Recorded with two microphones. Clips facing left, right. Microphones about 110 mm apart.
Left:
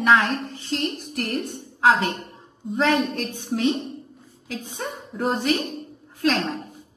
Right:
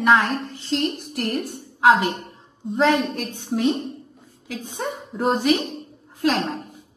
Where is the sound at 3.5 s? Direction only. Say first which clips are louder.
Right 2 dB; centre (ahead or behind).